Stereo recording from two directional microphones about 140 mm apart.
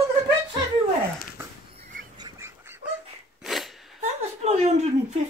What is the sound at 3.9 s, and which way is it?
Chuckle, 50° right (ahead or behind).